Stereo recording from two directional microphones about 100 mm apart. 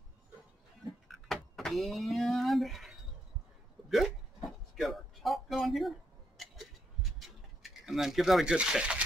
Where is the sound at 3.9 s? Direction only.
Centre (ahead or behind).